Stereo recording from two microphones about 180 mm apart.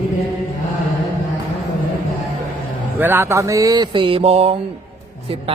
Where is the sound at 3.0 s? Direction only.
10° right (ahead or behind).